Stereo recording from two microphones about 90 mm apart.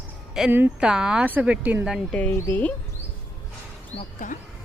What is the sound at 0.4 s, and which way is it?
Speech, 5° right (ahead or behind).